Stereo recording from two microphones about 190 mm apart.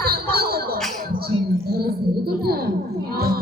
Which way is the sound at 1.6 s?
50° right (ahead or behind).